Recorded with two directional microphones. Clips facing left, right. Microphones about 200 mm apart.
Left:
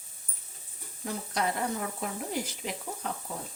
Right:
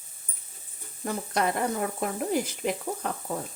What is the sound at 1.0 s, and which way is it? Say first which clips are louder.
Speech: right 4 dB; 55° right (ahead or behind).